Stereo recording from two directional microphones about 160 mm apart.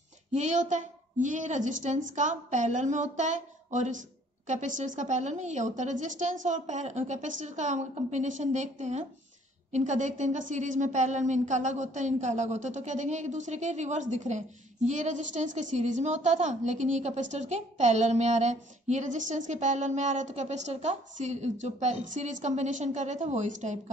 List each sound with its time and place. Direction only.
0.3 s a woman's voice: 45° right (ahead or behind)